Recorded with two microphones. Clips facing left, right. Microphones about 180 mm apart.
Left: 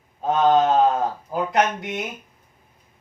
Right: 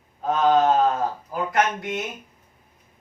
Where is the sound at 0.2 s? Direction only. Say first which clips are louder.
Left 2 dB; 25° left (ahead or behind).